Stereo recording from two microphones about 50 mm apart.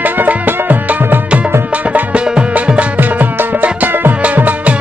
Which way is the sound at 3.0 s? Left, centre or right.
Right.